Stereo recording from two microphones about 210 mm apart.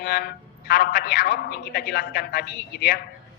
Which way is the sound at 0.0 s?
50° left (ahead or behind).